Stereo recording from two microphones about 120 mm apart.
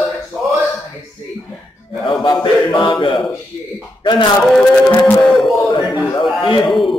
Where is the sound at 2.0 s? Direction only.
40° left (ahead or behind).